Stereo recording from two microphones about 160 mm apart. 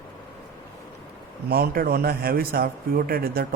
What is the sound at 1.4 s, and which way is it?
Speech, 70° right (ahead or behind).